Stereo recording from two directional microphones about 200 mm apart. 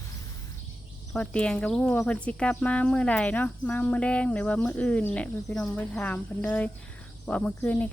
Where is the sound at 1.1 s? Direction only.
5° left (ahead or behind).